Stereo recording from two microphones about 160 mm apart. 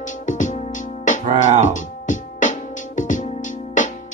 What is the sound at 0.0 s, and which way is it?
Music, 50° left (ahead or behind).